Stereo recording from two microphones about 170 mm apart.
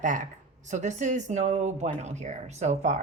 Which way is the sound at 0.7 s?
45° right (ahead or behind).